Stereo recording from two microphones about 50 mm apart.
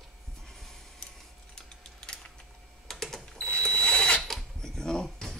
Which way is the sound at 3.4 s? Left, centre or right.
Centre.